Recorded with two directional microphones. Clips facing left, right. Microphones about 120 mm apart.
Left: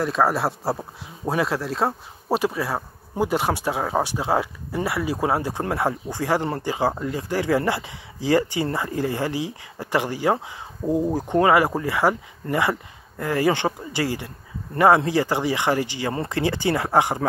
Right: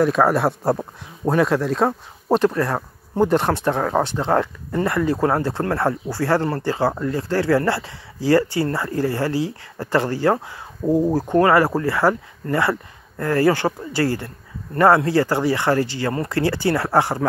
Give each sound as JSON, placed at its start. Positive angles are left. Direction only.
{"t": 0.0, "sound": "speech", "side_deg": 0}
{"t": 11.1, "sound": "speech", "side_deg": 20}